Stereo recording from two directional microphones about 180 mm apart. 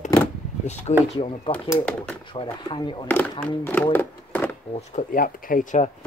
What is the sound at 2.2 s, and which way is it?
Speech, 25° left (ahead or behind).